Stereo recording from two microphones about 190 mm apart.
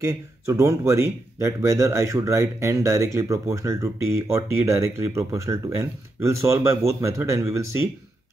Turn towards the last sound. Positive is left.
turn(degrees=-15)  # may be behind; listen again after turning